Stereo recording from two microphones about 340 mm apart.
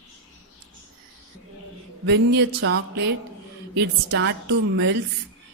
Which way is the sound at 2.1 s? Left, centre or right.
Right.